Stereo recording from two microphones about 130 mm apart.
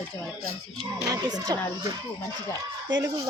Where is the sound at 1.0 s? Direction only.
30° right (ahead or behind).